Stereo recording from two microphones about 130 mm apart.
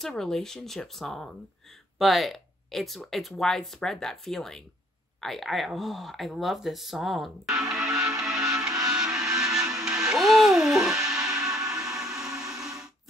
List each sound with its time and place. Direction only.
0.0 s speech: 5° left (ahead or behind)
7.9 s music: 25° right (ahead or behind)
8.2 s music: 5° right (ahead or behind)